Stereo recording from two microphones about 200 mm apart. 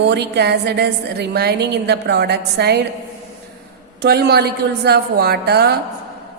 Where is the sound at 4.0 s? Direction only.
55° right (ahead or behind).